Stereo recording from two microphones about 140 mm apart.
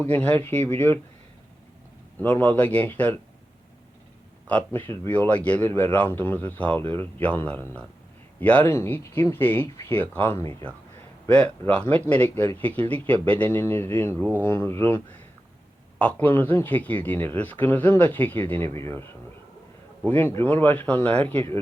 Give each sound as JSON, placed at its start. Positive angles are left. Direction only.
{"t": 0.0, "sound": "a man's voice", "side_deg": 10}
{"t": 2.1, "sound": "a man's voice", "side_deg": 10}
{"t": 4.4, "sound": "a man's voice", "side_deg": 10}
{"t": 20.1, "sound": "a man's voice", "side_deg": 15}